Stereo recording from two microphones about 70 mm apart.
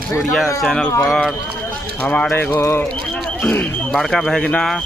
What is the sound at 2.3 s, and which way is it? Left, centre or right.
Speech, left.